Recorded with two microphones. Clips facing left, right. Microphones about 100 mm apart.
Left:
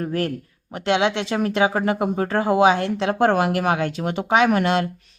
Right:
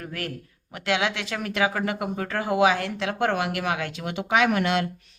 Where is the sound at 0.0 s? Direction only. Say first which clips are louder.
Left 9 dB; 35° left (ahead or behind).